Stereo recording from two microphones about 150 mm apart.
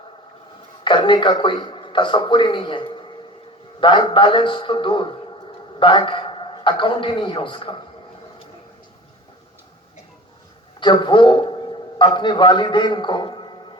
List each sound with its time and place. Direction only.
0.9 s a man's voice: 30° left (ahead or behind)
10.8 s a man's voice: 30° left (ahead or behind)